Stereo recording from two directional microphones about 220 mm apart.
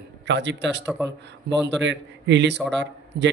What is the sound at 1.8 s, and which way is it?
Speech, 55° right (ahead or behind).